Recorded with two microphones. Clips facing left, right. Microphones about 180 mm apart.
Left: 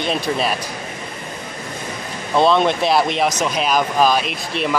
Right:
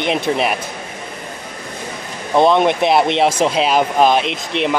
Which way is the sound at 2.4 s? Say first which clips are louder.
Right 2 dB; 15° right (ahead or behind).